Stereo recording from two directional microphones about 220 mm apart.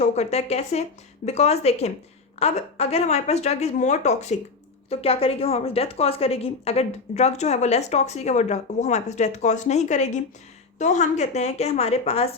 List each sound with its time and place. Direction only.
0.0 s a woman's voice: 30° left (ahead or behind)